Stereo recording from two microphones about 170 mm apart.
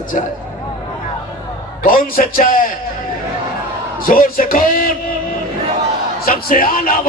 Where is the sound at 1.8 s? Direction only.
55° left (ahead or behind).